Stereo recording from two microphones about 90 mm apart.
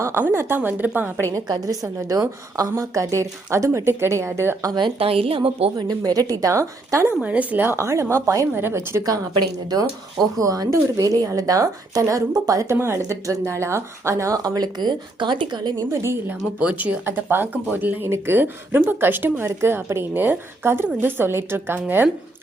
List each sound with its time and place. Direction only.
0.0 s a woman's voice: 25° right (ahead or behind)
1.5 s speech: 45° right (ahead or behind); by 4.7 s 30° right (ahead or behind)
4.7 s a woman's voice: 75° right (ahead or behind); by 5.7 s 90° right
5.7 s speech: 45° right (ahead or behind)
7.2 s a woman's voice: 15° right (ahead or behind); by 8.4 s 35° right (ahead or behind)
8.5 s speech: 25° right (ahead or behind); by 15.7 s 55° right (ahead or behind)
15.9 s speech: 30° right (ahead or behind)
16.6 s a woman's voice: 15° right (ahead or behind)